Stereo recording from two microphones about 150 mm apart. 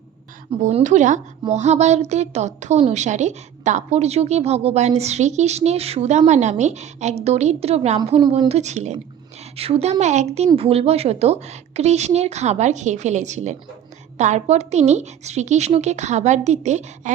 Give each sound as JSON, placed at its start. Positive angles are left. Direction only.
{"t": 0.6, "sound": "a woman's voice", "side_deg": -55}